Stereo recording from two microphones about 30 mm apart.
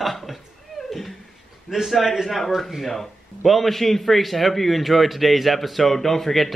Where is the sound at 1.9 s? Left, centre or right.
Centre.